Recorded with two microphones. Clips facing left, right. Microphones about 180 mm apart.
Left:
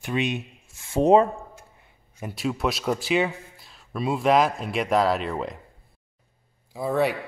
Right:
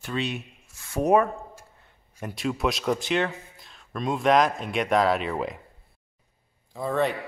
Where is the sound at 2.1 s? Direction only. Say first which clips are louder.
Left 1 dB; centre (ahead or behind).